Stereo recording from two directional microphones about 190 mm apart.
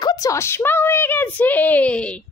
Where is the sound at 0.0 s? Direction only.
20° left (ahead or behind).